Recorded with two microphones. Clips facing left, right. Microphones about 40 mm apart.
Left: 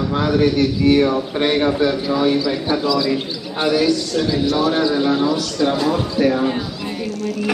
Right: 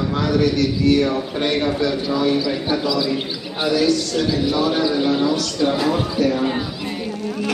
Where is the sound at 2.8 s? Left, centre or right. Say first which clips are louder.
Left 2 dB; centre.